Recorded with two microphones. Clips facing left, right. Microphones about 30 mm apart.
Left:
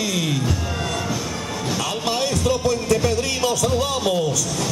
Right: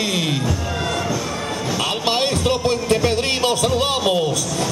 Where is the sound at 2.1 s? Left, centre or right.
Right.